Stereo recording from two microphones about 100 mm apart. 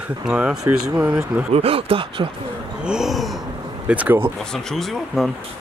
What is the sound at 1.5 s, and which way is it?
Speech, 70° right (ahead or behind).